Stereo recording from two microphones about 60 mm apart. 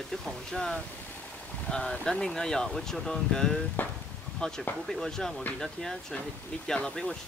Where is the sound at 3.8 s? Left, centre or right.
Left.